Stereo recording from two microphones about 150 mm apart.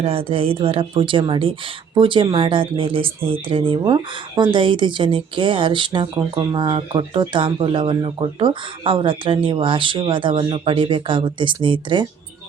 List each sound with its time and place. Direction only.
0.0 s speech: 40° right (ahead or behind)